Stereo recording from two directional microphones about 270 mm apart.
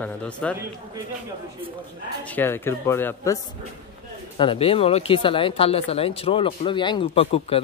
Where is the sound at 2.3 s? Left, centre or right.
Centre.